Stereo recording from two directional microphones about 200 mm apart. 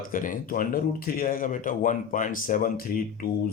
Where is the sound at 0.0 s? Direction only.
40° left (ahead or behind).